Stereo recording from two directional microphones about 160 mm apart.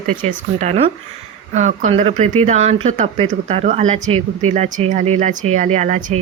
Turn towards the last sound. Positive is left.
turn(degrees=-50)  # may be behind; listen again after turning